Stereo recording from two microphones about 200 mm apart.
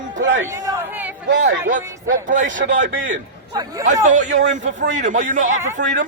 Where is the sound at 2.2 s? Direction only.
40° right (ahead or behind).